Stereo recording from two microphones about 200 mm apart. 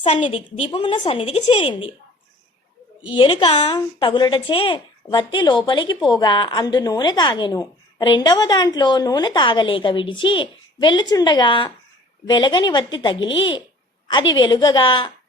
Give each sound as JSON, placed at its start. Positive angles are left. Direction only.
{"t": 0.0, "sound": "a woman's voice", "side_deg": 25}
{"t": 3.1, "sound": "a woman's voice", "side_deg": 25}